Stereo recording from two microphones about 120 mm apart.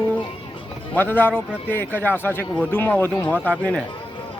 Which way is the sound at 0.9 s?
15° left (ahead or behind).